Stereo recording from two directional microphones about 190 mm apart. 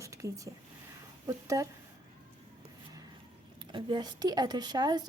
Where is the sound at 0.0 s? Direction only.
15° right (ahead or behind).